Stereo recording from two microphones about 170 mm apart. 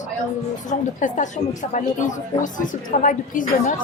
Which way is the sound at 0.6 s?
45° left (ahead or behind).